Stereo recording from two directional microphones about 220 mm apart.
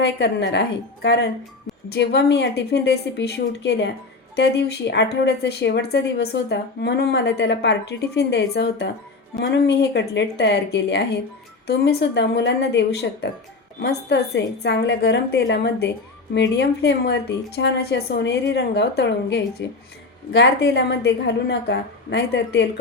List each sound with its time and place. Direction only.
0.0 s a woman's voice: 50° left (ahead or behind)